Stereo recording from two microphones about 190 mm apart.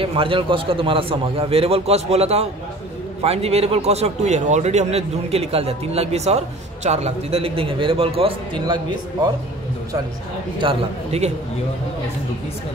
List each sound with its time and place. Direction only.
0.0 s a man's voice: 30° right (ahead or behind)
10.6 s a man's voice: 30° right (ahead or behind)